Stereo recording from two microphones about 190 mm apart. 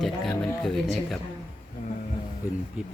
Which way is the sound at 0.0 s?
Centre (ahead or behind).